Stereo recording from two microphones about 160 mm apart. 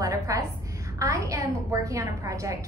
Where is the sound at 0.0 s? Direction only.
20° right (ahead or behind).